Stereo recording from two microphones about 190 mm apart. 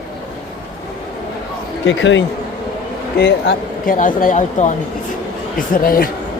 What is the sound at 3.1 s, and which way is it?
Speech, 55° left (ahead or behind).